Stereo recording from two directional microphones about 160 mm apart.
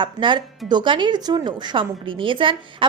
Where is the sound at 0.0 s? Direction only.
30° right (ahead or behind).